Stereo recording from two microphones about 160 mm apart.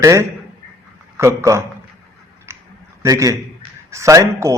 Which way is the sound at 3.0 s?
20° right (ahead or behind).